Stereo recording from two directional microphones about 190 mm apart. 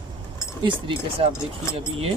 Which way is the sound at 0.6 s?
25° right (ahead or behind).